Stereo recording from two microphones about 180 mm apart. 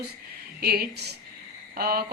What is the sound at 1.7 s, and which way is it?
Speech, 55° right (ahead or behind).